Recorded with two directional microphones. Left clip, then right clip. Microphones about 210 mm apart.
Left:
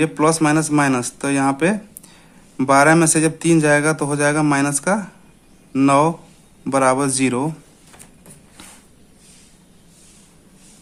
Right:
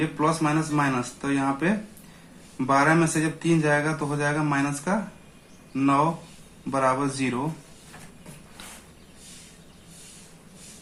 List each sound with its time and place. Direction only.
0.0 s a man's voice: 50° left (ahead or behind)